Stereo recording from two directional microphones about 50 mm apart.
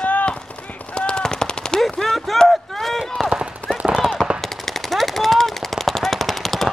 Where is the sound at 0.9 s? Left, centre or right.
Centre.